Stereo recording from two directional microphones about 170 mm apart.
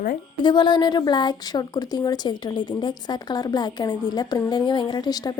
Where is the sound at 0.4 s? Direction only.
25° left (ahead or behind).